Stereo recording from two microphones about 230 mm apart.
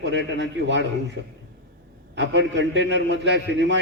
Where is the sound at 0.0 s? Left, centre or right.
Right.